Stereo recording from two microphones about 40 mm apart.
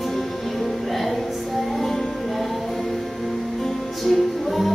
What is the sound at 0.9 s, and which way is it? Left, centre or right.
Music, centre.